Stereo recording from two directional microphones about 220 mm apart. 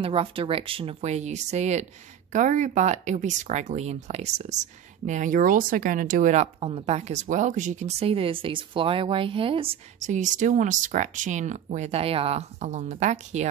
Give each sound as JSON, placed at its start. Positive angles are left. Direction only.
{"t": 0.0, "sound": "speech", "side_deg": -25}